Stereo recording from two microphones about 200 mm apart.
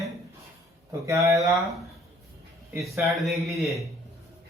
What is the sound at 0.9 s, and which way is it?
Speech, 15° right (ahead or behind).